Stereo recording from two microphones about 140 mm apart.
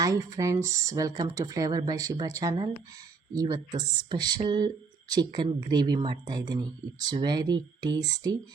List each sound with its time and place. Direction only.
0.0 s speech: 25° right (ahead or behind)